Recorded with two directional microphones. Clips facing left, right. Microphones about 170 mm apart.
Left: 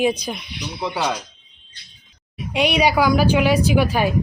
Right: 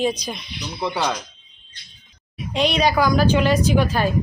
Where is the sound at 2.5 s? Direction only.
10° left (ahead or behind).